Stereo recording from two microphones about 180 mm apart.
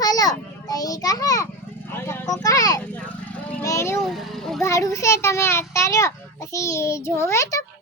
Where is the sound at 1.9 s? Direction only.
10° left (ahead or behind).